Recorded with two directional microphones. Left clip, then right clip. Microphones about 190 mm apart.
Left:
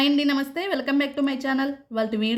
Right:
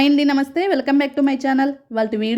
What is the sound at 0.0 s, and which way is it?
A woman's voice, 15° right (ahead or behind).